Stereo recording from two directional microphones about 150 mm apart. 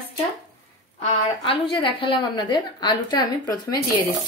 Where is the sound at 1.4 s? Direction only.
35° left (ahead or behind).